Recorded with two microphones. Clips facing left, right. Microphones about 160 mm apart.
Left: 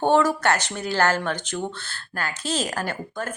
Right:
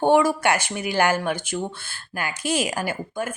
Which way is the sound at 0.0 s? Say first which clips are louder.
Right 1 dB; 10° right (ahead or behind).